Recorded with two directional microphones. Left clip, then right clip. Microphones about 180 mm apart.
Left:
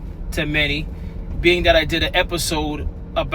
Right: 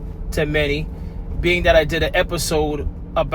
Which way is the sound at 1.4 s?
25° right (ahead or behind).